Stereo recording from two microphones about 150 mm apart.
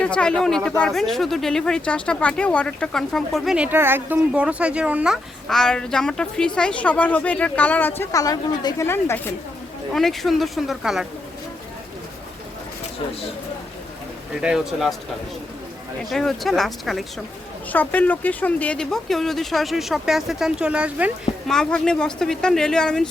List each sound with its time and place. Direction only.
0.0 s speech: 5° left (ahead or behind)
9.9 s speech: centre (ahead or behind)
14.4 s speech: centre (ahead or behind)
16.0 s speech: centre (ahead or behind)
21.4 s speech: 5° left (ahead or behind)